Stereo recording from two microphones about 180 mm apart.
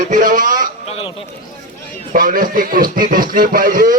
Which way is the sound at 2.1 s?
50° right (ahead or behind).